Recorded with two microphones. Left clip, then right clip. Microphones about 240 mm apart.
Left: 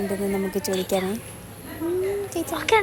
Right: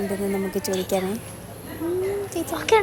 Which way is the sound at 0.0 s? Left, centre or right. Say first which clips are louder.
Even; centre.